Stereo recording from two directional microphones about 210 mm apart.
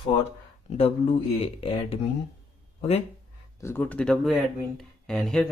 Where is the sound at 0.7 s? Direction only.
30° left (ahead or behind).